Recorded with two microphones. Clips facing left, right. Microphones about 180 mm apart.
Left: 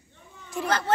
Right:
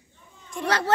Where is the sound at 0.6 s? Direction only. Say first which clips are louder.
Right 2 dB; 75° right (ahead or behind).